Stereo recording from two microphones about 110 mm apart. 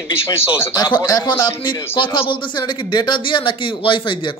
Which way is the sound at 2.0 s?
50° left (ahead or behind).